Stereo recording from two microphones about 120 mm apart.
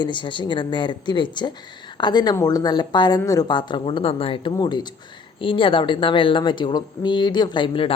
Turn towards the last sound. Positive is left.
turn(degrees=50)  # may be behind; listen again after turning